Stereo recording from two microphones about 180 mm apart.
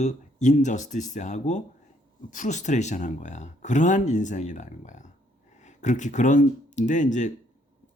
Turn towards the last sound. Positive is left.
turn(degrees=45)  # may be behind; listen again after turning